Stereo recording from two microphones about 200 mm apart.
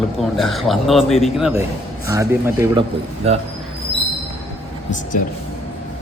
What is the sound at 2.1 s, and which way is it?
Speech, 15° right (ahead or behind).